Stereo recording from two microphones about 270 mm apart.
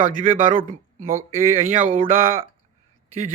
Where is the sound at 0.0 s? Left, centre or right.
Right.